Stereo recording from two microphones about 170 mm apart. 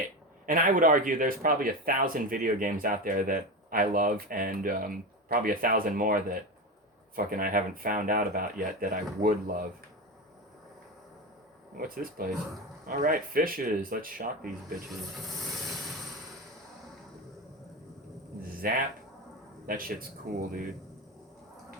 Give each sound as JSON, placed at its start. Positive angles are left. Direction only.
{"t": 0.4, "sound": "speech", "side_deg": -50}
{"t": 11.8, "sound": "speech", "side_deg": -60}
{"t": 15.1, "sound": "a sound", "side_deg": 0}
{"t": 18.6, "sound": "speech", "side_deg": -55}